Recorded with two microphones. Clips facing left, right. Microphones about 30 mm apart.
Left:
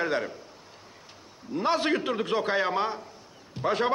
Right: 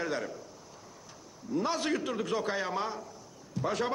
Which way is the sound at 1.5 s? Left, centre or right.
Left.